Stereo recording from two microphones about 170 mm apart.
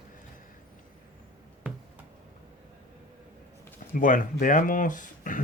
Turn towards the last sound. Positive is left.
turn(degrees=50)  # may be behind; listen again after turning